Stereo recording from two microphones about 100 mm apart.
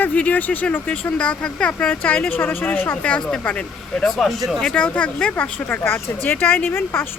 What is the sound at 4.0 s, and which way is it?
Speech, centre (ahead or behind).